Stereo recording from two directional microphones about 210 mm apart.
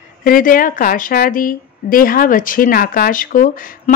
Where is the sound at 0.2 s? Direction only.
40° left (ahead or behind).